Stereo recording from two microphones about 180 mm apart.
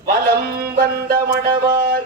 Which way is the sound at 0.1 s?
55° right (ahead or behind).